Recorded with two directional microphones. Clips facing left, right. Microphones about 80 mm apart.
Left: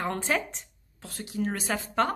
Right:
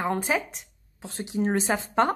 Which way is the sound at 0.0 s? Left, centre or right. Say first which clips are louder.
Right 3 dB; centre.